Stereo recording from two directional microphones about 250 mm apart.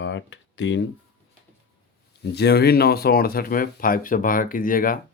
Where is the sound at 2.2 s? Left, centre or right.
Left.